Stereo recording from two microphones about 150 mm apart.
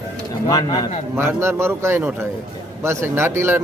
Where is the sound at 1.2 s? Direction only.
15° right (ahead or behind).